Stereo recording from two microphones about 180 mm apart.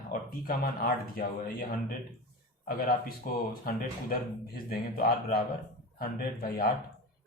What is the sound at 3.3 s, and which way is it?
Speech, 50° left (ahead or behind).